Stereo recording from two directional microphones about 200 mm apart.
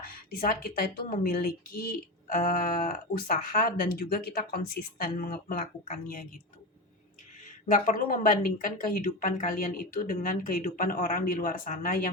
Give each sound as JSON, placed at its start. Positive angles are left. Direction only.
{"t": 0.0, "sound": "speech", "side_deg": 50}
{"t": 7.7, "sound": "speech", "side_deg": 45}